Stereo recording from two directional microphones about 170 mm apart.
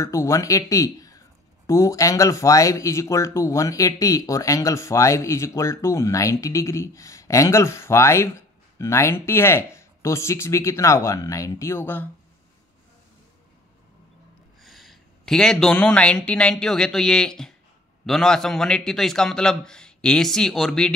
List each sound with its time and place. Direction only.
0.0 s speech: 15° left (ahead or behind)
14.6 s a man's voice: centre (ahead or behind)